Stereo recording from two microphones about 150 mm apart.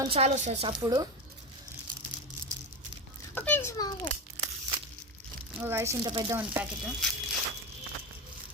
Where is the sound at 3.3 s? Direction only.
15° left (ahead or behind).